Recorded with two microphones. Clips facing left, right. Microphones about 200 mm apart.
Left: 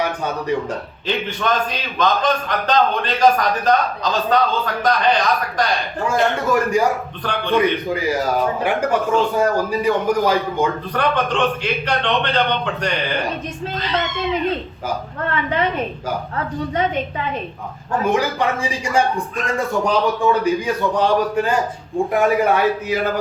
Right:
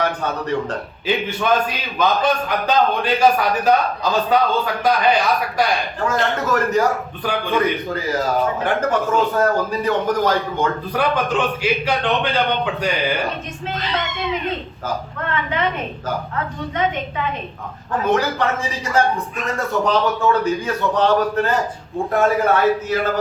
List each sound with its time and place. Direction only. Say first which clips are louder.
0.0 s a man's voice: even; 15° left (ahead or behind)
1.0 s a man's voice: right 2 dB; 10° right (ahead or behind)
6.1 s a man's voice: left 2 dB; 10° left (ahead or behind)
7.3 s a man's voice: left 2 dB; 5° right (ahead or behind)
7.9 s a man's voice: left 1 dB; 15° left (ahead or behind)
10.9 s a man's voice: right 1 dB; 5° right (ahead or behind)
18.0 s a man's voice: even; 15° left (ahead or behind)